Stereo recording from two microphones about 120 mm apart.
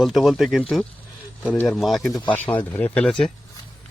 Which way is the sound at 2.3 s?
15° left (ahead or behind).